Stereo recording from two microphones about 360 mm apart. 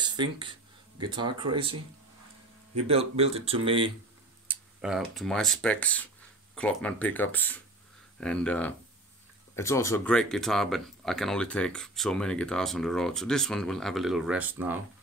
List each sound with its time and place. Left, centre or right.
0.0 s a sound: centre
1.5 s speech: centre
4.5 s speech: centre